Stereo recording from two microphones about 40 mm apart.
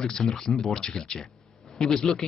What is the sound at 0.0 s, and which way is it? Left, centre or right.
A man's voice, centre.